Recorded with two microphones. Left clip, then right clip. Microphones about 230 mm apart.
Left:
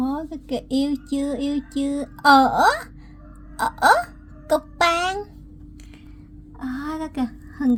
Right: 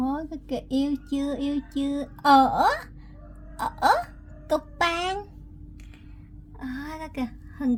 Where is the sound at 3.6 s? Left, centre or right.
Centre.